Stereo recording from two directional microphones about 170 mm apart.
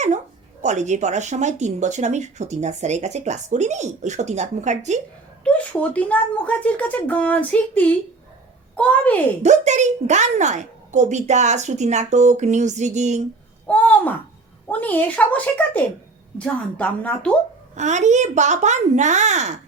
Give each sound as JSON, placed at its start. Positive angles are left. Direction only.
{"t": 0.6, "sound": "speech", "side_deg": -45}
{"t": 5.4, "sound": "speech", "side_deg": 5}
{"t": 9.4, "sound": "speech", "side_deg": -45}
{"t": 13.7, "sound": "a sound", "side_deg": 10}
{"t": 14.7, "sound": "speech", "side_deg": 10}
{"t": 17.7, "sound": "speech", "side_deg": -45}